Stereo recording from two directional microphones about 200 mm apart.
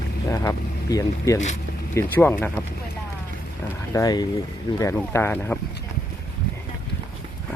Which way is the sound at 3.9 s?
20° left (ahead or behind).